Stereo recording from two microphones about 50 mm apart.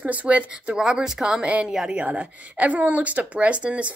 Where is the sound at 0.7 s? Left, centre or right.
Centre.